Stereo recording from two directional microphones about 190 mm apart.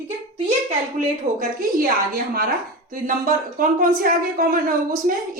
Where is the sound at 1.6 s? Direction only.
50° right (ahead or behind).